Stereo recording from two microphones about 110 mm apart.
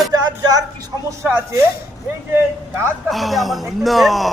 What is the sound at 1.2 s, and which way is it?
Speech, 20° right (ahead or behind).